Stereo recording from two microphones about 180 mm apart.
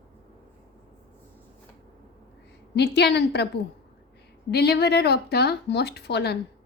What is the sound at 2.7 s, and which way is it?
A woman's voice, 65° left (ahead or behind).